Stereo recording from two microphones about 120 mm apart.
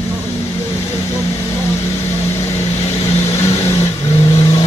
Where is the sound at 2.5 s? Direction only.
55° left (ahead or behind).